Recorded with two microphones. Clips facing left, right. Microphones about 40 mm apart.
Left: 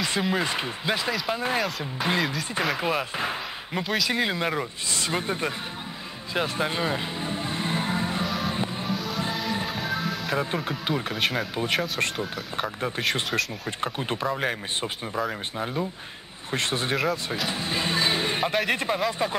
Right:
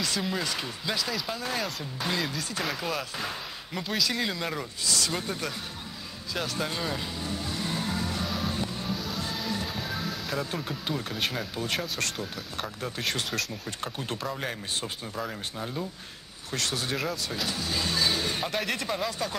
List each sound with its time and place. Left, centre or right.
0.0 s speech: left
3.8 s speech: centre
4.1 s speech: left
6.3 s music: left
8.9 s music: centre
10.3 s speech: left
11.1 s speech: centre
12.0 s speech: left